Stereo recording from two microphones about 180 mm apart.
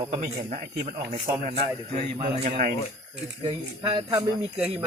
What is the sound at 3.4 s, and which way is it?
Speech, 25° right (ahead or behind).